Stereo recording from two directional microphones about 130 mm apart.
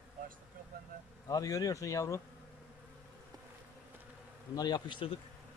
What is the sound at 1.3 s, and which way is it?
Speech, 25° left (ahead or behind).